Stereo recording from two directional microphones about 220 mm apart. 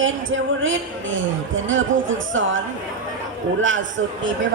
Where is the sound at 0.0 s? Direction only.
60° right (ahead or behind).